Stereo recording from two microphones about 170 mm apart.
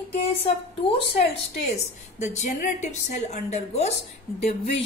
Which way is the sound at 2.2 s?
45° left (ahead or behind).